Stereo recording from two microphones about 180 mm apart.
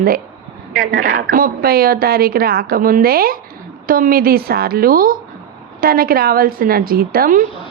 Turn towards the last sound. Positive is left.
turn(degrees=-50)  # may be behind; listen again after turning